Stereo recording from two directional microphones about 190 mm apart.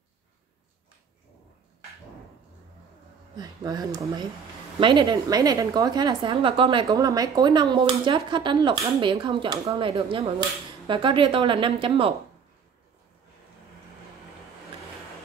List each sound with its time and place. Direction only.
3.3 s speech: 20° right (ahead or behind)